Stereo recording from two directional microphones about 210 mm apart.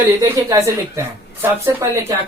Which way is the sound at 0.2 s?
15° right (ahead or behind).